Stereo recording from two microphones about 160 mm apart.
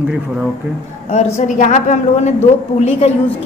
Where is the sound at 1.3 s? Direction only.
50° left (ahead or behind).